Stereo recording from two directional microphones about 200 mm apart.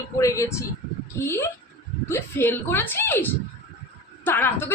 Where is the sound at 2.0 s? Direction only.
10° left (ahead or behind).